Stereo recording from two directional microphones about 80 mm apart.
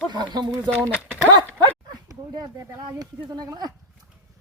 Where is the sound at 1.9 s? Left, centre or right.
Right.